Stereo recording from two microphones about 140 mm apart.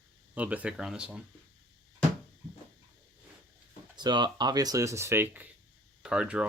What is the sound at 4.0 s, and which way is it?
Speech, 30° right (ahead or behind).